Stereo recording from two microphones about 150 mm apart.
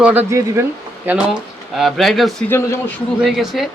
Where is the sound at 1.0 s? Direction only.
10° right (ahead or behind).